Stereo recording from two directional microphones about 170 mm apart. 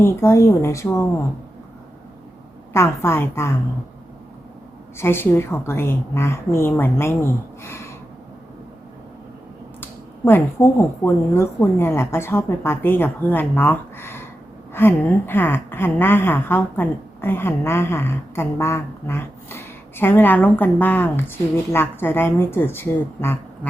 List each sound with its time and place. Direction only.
0.0 s speech: 15° left (ahead or behind)
2.7 s speech: 15° left (ahead or behind)
4.9 s speech: 15° left (ahead or behind)
9.8 s speech: 10° left (ahead or behind)